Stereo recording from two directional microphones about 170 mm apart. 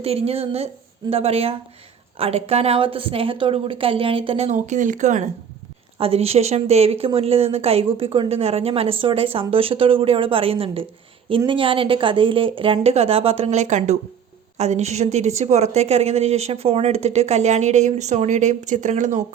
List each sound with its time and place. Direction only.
0.0 s speech: 35° right (ahead or behind)